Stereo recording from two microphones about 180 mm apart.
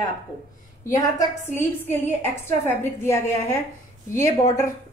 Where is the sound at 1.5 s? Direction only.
10° left (ahead or behind).